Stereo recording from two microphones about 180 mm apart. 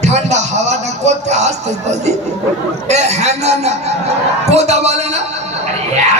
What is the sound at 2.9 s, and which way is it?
Speech, 40° right (ahead or behind).